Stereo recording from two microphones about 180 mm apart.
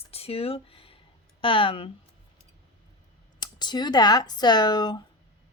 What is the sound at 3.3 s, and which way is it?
A woman's voice, 25° left (ahead or behind).